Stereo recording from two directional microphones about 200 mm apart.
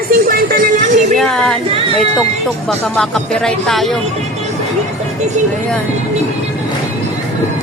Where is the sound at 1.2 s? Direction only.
5° left (ahead or behind).